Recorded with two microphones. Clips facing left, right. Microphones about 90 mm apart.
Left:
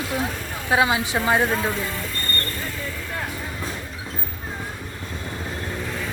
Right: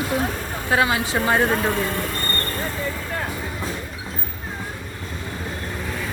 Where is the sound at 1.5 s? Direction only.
55° right (ahead or behind).